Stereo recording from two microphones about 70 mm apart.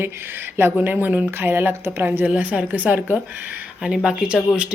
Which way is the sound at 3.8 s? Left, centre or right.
Centre.